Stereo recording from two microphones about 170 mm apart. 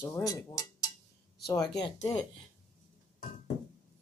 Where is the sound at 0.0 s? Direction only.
20° left (ahead or behind).